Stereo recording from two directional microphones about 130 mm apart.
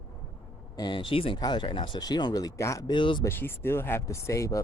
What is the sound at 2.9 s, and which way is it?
Speech, 40° left (ahead or behind).